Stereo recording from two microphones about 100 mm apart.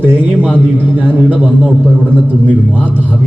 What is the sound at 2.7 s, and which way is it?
Speech, 15° right (ahead or behind).